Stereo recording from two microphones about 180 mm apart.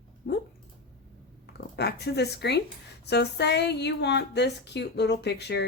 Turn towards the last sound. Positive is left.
turn(degrees=70)  # may be behind; listen again after turning